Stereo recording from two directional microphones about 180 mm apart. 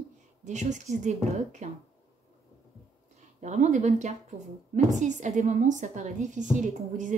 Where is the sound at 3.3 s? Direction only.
40° right (ahead or behind).